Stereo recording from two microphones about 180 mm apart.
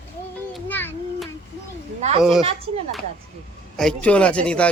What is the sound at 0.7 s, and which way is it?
Child singing, 10° left (ahead or behind).